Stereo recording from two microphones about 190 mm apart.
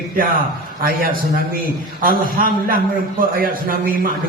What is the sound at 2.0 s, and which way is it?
Speech, 50° right (ahead or behind).